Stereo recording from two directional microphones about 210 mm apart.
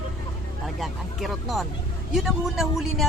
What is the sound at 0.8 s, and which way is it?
Speech, centre (ahead or behind).